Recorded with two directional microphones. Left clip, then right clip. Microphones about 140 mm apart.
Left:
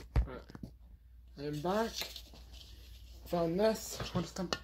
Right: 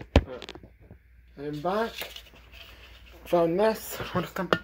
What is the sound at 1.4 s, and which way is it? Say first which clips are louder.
Speech: right 6 dB; 30° left (ahead or behind).